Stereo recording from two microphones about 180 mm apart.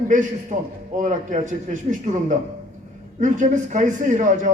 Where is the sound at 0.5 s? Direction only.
45° right (ahead or behind).